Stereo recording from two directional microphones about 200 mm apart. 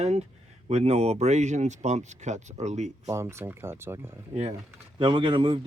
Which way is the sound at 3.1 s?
15° right (ahead or behind).